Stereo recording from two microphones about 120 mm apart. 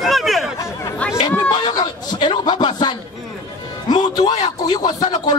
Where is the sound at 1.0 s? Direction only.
10° left (ahead or behind).